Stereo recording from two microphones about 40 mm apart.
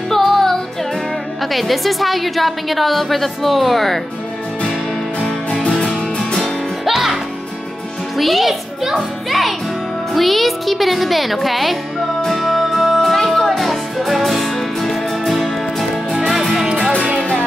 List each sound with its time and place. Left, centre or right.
0.1 s music: centre
1.4 s a woman's voice: centre
5.7 s music: centre
6.4 s music: centre
8.2 s a child's voice: centre
12.3 s music: centre